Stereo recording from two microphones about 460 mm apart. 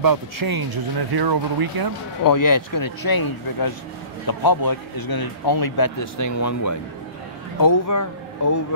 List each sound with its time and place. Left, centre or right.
0.0 s speech: right
2.2 s speech: left